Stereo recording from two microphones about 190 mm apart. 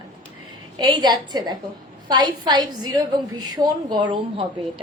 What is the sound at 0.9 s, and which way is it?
A woman's voice, 20° right (ahead or behind).